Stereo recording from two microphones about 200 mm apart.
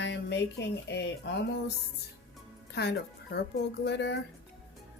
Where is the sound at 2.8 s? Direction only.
55° left (ahead or behind).